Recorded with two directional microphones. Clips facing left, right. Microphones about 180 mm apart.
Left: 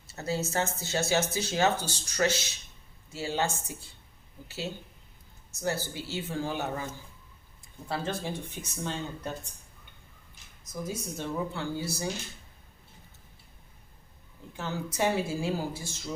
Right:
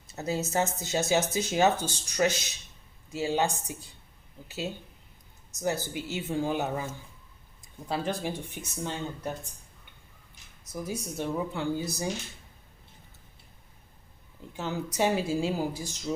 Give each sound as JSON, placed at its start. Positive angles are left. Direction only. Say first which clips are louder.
{"t": 0.2, "sound": "speech", "louder": "right 2 dB", "side_deg": -15}
{"t": 7.9, "sound": "speech", "louder": "right 2 dB", "side_deg": -15}
{"t": 10.8, "sound": "speech", "louder": "right 3 dB", "side_deg": -15}
{"t": 14.5, "sound": "speech", "louder": "right 2 dB", "side_deg": -15}